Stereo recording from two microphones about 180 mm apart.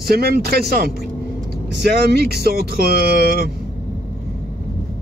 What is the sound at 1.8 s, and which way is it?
Speech, 65° right (ahead or behind).